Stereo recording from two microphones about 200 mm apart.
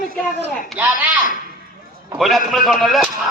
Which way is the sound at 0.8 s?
10° right (ahead or behind).